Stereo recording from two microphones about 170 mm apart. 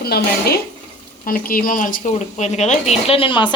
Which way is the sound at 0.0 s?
65° left (ahead or behind).